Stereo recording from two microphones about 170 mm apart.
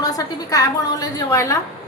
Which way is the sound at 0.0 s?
20° left (ahead or behind).